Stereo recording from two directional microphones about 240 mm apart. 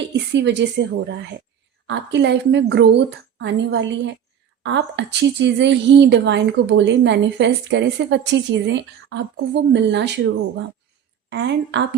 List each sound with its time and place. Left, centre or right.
0.3 s a woman's voice: right
1.9 s a woman's voice: right